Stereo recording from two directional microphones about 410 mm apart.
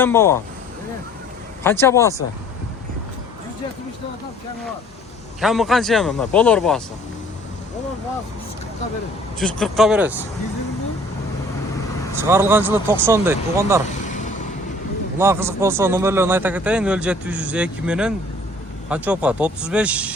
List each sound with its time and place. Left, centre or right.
0.0 s a man's voice: centre
1.6 s speech: centre
5.4 s a man's voice: centre
9.4 s a man's voice: centre
12.2 s a man's voice: centre
15.2 s a man's voice: centre